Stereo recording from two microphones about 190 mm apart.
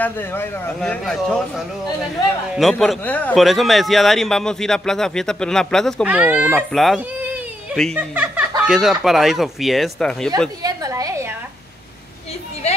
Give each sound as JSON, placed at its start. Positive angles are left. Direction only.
{"t": 0.0, "sound": "a man's voice", "side_deg": 10}
{"t": 2.5, "sound": "a man's voice", "side_deg": 0}
{"t": 6.0, "sound": "speech", "side_deg": -10}
{"t": 8.0, "sound": "a man's voice", "side_deg": -10}
{"t": 10.6, "sound": "a sound", "side_deg": -20}